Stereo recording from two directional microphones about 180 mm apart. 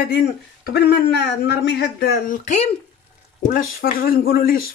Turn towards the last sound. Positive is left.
turn(degrees=55)  # may be behind; listen again after turning